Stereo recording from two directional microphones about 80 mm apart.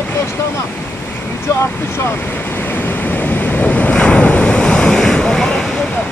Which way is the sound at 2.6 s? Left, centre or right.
Left.